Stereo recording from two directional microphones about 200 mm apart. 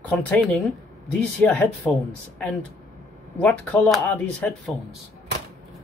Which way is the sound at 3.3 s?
10° left (ahead or behind).